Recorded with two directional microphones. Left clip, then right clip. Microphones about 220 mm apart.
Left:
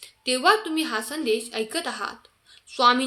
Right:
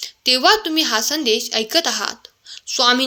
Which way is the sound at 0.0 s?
40° right (ahead or behind).